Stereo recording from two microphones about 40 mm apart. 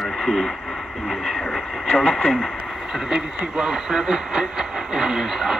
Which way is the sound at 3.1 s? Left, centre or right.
Centre.